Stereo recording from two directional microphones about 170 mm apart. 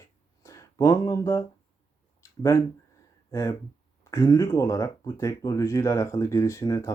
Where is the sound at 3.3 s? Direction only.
20° left (ahead or behind).